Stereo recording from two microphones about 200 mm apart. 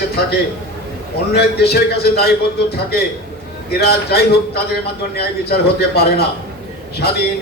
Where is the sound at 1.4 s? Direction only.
55° left (ahead or behind).